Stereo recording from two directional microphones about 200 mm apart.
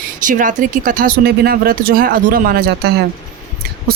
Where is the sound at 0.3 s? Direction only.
40° right (ahead or behind).